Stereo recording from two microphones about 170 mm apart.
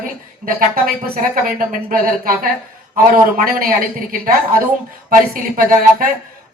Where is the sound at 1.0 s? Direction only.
60° right (ahead or behind).